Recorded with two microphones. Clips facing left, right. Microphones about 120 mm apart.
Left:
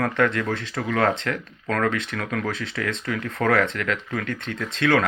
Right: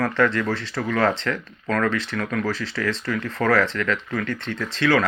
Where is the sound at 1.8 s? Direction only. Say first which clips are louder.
Right 1 dB; 55° left (ahead or behind).